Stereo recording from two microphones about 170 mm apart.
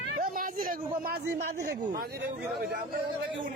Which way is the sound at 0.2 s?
55° right (ahead or behind).